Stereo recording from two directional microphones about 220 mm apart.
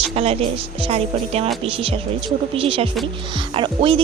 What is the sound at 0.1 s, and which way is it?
Speech, 25° right (ahead or behind).